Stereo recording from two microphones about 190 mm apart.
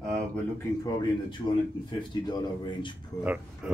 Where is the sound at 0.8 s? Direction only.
20° left (ahead or behind).